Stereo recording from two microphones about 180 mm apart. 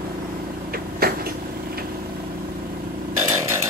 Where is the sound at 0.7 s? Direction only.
55° right (ahead or behind).